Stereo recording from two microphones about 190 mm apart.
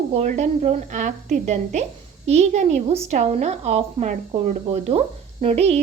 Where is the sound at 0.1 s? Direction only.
35° right (ahead or behind).